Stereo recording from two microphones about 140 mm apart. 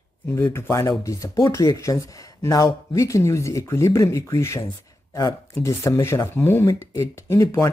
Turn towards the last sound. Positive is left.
turn(degrees=20)  # may be behind; listen again after turning